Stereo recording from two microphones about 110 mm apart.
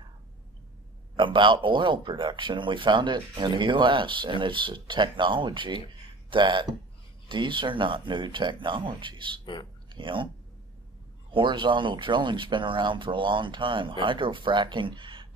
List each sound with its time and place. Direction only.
1.1 s a man's voice: 45° right (ahead or behind)
11.3 s a man's voice: 45° right (ahead or behind)